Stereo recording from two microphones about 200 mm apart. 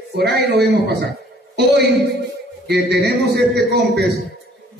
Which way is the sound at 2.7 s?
55° right (ahead or behind).